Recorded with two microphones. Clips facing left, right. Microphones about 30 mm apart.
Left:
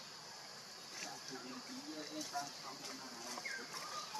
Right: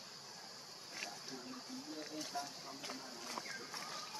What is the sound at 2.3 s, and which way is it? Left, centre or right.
Speech, right.